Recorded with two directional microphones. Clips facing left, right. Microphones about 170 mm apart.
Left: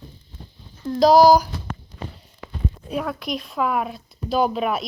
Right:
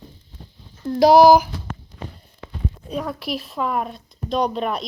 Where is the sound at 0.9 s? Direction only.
65° right (ahead or behind).